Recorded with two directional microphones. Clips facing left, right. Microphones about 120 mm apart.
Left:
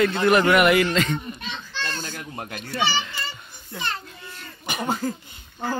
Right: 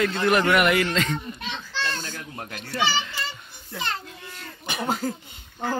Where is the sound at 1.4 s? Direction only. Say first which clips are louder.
Right 1 dB; 85° right.